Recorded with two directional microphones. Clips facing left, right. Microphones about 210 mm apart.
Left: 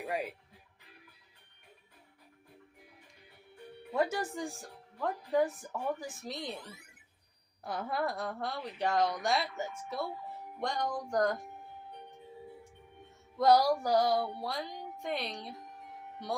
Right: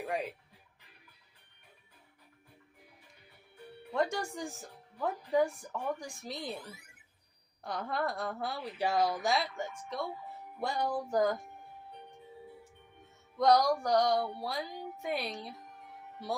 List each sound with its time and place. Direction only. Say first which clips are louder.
0.0 s speech: even; 5° left (ahead or behind)
3.9 s speech: left 1 dB; 5° left (ahead or behind)
10.6 s speech: right 1 dB; 5° right (ahead or behind)
13.3 s speech: left 1 dB; 5° left (ahead or behind)